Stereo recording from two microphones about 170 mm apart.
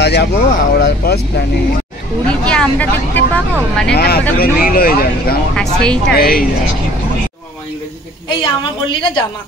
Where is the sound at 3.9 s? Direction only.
70° left (ahead or behind).